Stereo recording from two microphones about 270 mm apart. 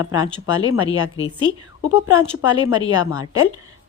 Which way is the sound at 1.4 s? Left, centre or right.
Left.